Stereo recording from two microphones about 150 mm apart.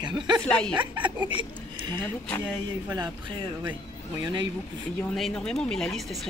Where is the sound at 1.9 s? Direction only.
15° left (ahead or behind).